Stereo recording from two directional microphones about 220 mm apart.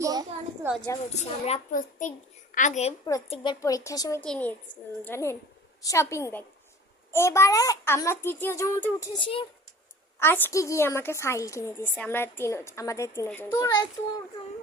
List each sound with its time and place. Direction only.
0.0 s a child's voice: 15° right (ahead or behind)
1.1 s a child's voice: 30° left (ahead or behind)
10.2 s a woman's voice: 10° left (ahead or behind)